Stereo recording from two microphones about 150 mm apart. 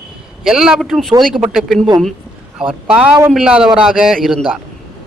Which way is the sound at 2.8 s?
5° right (ahead or behind).